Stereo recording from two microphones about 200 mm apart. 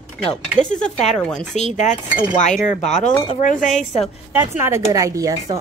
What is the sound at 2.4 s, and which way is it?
Chink, 35° left (ahead or behind).